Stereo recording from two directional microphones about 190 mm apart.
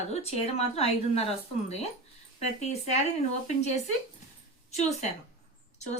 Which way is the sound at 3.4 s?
40° left (ahead or behind).